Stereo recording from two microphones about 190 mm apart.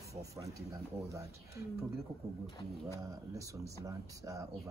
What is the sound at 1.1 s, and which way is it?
Speech, 15° right (ahead or behind).